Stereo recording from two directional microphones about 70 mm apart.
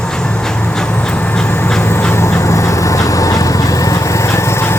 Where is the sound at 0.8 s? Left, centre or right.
Centre.